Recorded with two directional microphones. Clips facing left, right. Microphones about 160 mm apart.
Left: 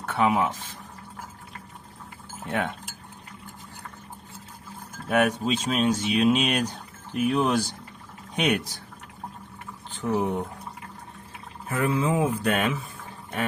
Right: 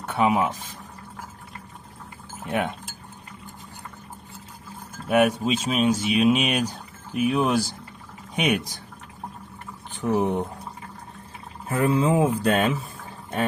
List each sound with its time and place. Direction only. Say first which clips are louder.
0.0 s speech: right 1 dB; 15° right (ahead or behind)
2.5 s speech: right 2 dB; 15° right (ahead or behind)
5.0 s speech: right 3 dB; 10° right (ahead or behind)
9.9 s speech: right 3 dB; 20° right (ahead or behind)
11.7 s speech: right 4 dB; 30° right (ahead or behind)